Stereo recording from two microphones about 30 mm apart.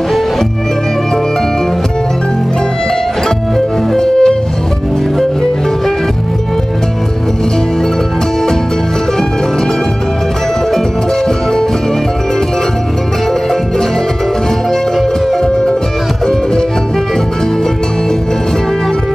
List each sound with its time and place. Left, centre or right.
4.0 s music: left